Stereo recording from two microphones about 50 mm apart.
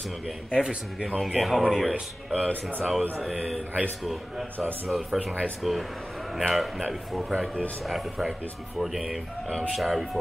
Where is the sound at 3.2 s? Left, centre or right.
Centre.